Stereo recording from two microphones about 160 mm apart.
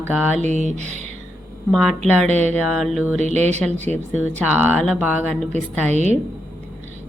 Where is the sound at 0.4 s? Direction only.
45° right (ahead or behind).